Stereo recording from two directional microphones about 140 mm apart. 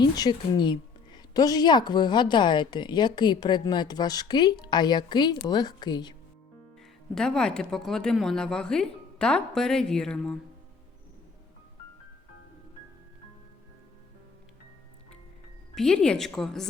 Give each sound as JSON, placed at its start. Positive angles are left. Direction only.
{"t": 0.0, "sound": "a woman's voice", "side_deg": 30}
{"t": 7.1, "sound": "speech", "side_deg": 5}
{"t": 15.7, "sound": "speech", "side_deg": 5}